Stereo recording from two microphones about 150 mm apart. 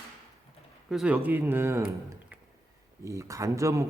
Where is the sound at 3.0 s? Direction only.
20° right (ahead or behind).